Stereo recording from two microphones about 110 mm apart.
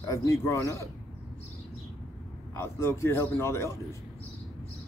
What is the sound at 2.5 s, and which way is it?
Speech, 25° left (ahead or behind).